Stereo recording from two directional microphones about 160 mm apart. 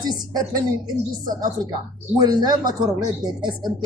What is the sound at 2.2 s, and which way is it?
A man's voice, 25° right (ahead or behind).